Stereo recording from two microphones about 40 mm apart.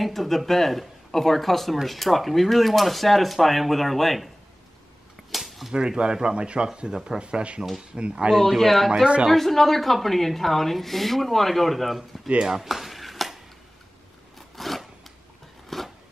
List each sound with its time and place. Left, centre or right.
0.0 s a woman's voice: centre
5.3 s a sound: centre
5.8 s speech: right
8.3 s a woman's voice: centre
9.0 s speech: right
9.3 s a woman's voice: centre
12.4 s dishes: centre
14.5 s a sound: centre